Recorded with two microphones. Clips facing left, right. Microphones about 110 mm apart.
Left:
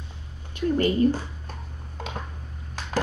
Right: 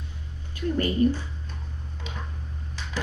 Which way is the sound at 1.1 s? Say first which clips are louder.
Left 2 dB; 45° left (ahead or behind).